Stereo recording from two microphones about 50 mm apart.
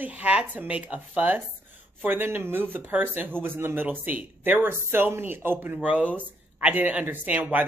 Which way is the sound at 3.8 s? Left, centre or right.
Right.